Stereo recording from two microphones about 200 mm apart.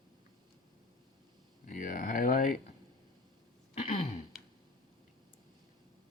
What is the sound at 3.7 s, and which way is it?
Throat clearing, 35° left (ahead or behind).